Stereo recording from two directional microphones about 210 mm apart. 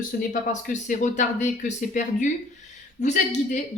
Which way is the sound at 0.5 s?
35° left (ahead or behind).